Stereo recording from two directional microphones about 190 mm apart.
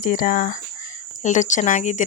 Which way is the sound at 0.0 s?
45° left (ahead or behind).